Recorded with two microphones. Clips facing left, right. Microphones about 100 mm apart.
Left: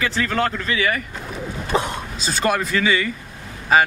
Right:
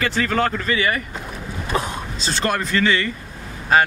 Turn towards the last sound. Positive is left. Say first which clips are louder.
# even
turn(degrees=5)  # may be behind; listen again after turning